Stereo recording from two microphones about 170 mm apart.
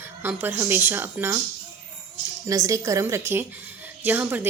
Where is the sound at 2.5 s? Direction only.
20° right (ahead or behind).